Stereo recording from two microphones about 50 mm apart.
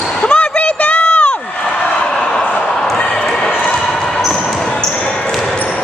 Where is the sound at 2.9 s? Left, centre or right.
Centre.